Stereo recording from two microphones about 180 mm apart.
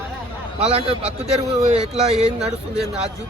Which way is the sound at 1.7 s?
30° right (ahead or behind).